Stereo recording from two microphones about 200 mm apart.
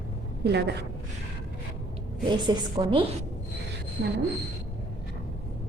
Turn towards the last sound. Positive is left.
turn(degrees=-50)  # may be behind; listen again after turning